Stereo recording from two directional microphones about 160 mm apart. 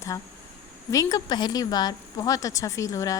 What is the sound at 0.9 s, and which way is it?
Speech, 20° left (ahead or behind).